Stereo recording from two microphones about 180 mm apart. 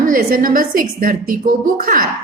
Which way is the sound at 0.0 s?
50° right (ahead or behind).